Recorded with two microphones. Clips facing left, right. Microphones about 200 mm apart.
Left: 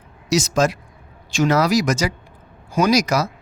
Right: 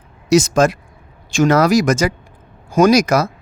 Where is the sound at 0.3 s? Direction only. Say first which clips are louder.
Right 5 dB; 55° right (ahead or behind).